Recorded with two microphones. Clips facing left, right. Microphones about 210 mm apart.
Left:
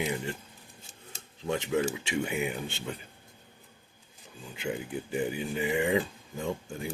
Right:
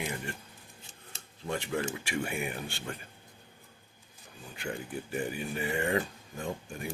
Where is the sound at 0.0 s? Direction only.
20° left (ahead or behind).